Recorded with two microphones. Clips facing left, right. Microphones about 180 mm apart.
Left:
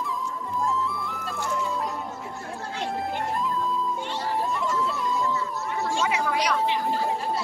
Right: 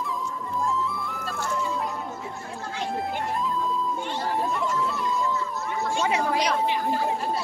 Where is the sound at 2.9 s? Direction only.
Centre (ahead or behind).